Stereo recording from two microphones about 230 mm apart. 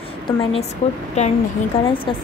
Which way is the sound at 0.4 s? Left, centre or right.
Left.